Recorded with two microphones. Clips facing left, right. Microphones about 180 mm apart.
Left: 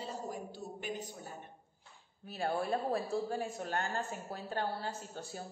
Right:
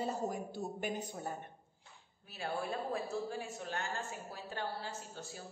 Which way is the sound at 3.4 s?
50° left (ahead or behind).